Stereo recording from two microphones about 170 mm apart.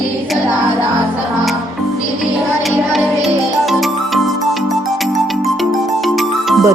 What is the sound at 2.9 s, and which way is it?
Music, centre (ahead or behind).